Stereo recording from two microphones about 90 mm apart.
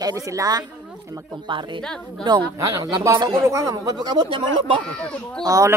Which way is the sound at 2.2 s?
60° right (ahead or behind).